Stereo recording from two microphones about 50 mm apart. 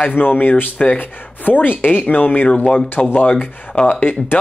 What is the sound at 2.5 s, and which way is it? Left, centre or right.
Speech, left.